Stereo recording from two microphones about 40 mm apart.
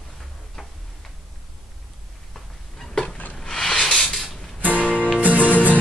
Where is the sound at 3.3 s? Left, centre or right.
Centre.